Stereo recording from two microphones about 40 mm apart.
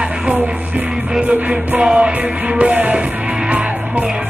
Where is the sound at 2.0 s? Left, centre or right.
Right.